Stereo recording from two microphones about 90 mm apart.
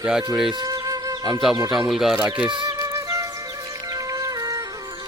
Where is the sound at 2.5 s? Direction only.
45° right (ahead or behind).